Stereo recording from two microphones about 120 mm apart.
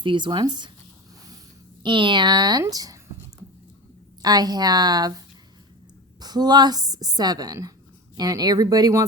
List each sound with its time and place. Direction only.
0.0 s a woman's voice: 40° right (ahead or behind)
1.8 s a woman's voice: 40° right (ahead or behind)
4.2 s a woman's voice: 35° right (ahead or behind)